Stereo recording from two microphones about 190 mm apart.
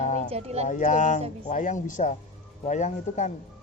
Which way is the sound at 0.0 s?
40° left (ahead or behind).